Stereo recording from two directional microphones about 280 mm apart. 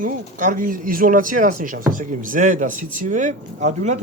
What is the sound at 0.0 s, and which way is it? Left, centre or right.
Speech, right.